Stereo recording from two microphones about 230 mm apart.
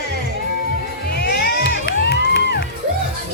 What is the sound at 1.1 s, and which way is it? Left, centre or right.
Music, left.